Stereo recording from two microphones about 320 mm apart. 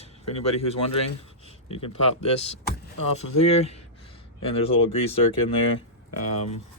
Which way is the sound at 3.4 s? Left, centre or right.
Centre.